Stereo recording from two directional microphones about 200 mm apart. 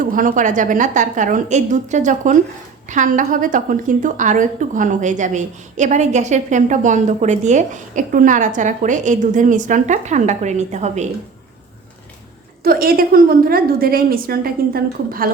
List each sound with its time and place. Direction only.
0.0 s a woman's voice: 45° right (ahead or behind)
12.6 s a woman's voice: 45° right (ahead or behind)